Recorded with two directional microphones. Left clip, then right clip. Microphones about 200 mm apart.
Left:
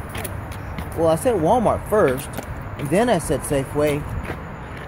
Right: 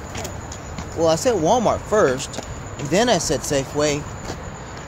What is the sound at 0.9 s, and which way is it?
Speech, 15° left (ahead or behind).